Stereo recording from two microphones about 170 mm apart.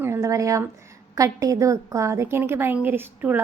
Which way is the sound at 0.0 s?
15° right (ahead or behind).